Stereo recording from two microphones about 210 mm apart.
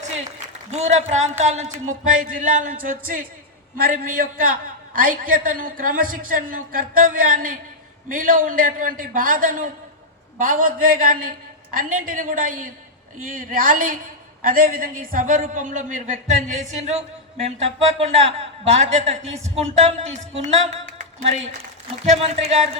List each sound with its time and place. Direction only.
0.4 s a man's voice: 35° right (ahead or behind)
20.4 s a sound: 35° right (ahead or behind)
21.4 s a man's voice: 30° right (ahead or behind)